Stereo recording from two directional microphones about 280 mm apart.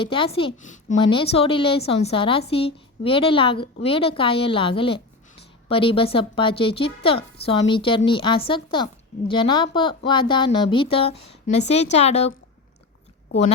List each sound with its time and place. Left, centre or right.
0.0 s a woman's voice: centre